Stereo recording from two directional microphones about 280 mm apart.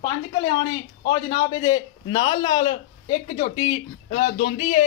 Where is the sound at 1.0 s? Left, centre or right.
Centre.